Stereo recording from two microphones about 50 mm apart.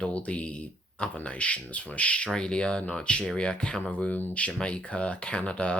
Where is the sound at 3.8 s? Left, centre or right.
Left.